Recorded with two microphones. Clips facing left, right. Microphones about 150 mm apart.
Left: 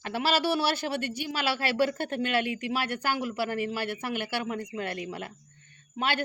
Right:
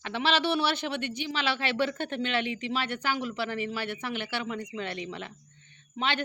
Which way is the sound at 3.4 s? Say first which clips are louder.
Left 2 dB; 45° left (ahead or behind).